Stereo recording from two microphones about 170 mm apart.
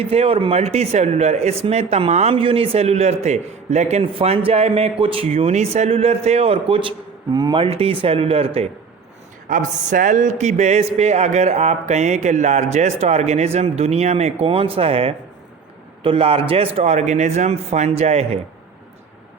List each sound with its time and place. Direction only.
0.0 s a man's voice: 35° right (ahead or behind)
9.5 s a man's voice: 50° right (ahead or behind)